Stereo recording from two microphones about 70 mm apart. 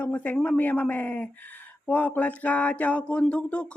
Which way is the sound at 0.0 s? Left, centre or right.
Left.